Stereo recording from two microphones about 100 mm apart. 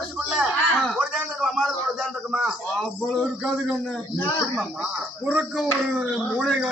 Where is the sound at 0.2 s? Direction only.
5° right (ahead or behind).